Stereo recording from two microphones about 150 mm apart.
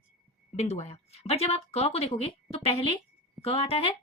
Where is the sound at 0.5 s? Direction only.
45° left (ahead or behind).